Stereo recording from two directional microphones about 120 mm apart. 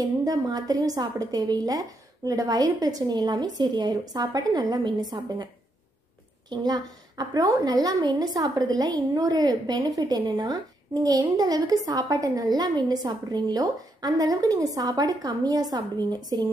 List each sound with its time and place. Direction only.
0.0 s a woman's voice: 30° right (ahead or behind)
6.5 s a woman's voice: 35° right (ahead or behind)